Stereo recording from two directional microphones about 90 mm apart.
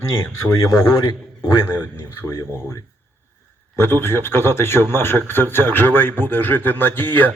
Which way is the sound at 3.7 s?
25° left (ahead or behind).